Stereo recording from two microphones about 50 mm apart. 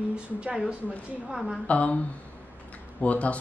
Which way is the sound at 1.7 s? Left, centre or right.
Left.